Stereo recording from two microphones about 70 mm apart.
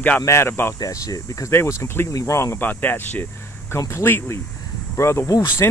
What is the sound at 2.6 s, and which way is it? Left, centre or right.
Speech, left.